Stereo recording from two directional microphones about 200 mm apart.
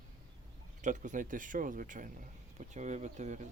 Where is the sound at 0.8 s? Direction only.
40° right (ahead or behind).